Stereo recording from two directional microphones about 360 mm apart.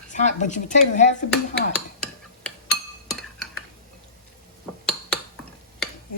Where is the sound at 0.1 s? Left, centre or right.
Centre.